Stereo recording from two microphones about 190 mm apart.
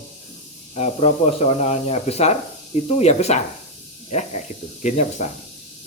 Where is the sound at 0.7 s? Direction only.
35° left (ahead or behind).